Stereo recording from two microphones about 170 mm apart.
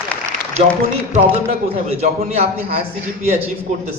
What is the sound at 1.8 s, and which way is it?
Speech, 40° right (ahead or behind).